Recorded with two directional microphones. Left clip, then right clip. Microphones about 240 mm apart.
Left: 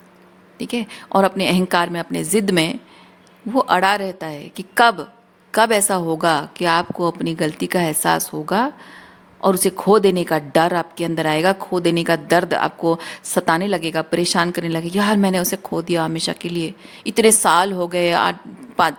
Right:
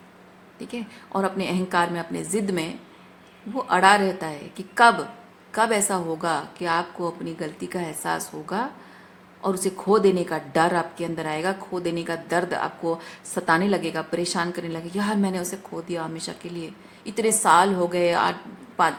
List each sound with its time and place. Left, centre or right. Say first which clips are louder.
0.6 s speech: left 10 dB; left